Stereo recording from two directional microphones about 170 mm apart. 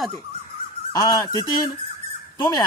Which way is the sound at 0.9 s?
20° left (ahead or behind).